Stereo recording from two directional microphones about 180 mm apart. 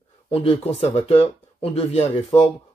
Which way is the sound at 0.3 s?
30° left (ahead or behind).